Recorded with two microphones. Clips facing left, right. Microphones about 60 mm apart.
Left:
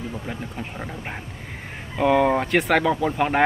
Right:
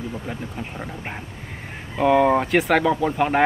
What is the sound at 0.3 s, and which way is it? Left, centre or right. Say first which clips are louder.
Speech: right 1 dB; centre.